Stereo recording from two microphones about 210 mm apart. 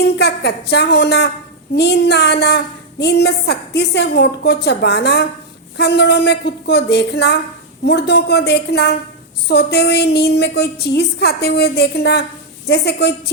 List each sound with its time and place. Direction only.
0.2 s a woman's voice: 50° left (ahead or behind)